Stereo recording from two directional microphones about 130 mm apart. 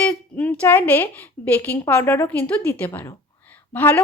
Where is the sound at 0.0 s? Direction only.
10° left (ahead or behind).